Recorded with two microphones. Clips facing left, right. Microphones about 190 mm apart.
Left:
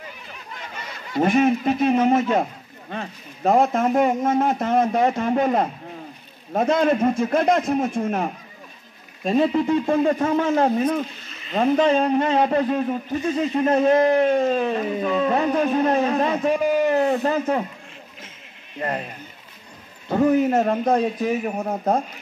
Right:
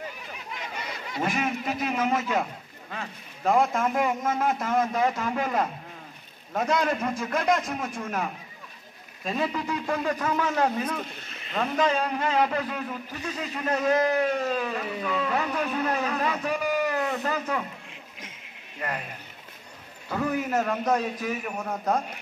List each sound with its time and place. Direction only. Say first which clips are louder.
1.2 s speech: left 10 dB; 50° left (ahead or behind)
1.6 s a man's voice: left 9 dB; 30° left (ahead or behind)
11.1 s a sound: left 1 dB; 55° right (ahead or behind)
11.5 s a man's voice: left 7 dB; 30° left (ahead or behind)
18.8 s speech: left 6 dB; 30° left (ahead or behind)
20.1 s a man's voice: left 9 dB; 30° left (ahead or behind)